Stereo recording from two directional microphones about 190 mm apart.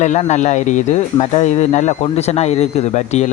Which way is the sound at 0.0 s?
40° left (ahead or behind).